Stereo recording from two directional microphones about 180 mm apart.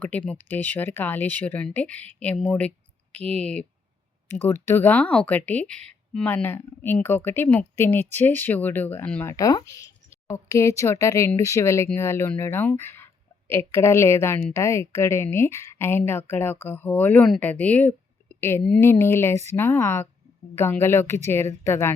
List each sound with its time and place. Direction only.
0.0 s a woman's voice: 10° left (ahead or behind)
9.3 s a woman's voice: 20° left (ahead or behind)